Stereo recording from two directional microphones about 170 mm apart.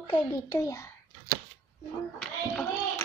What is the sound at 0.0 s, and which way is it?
Speech, 30° left (ahead or behind).